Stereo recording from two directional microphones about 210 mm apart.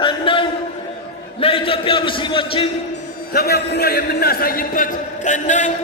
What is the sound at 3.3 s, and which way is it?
A man's voice, 50° left (ahead or behind).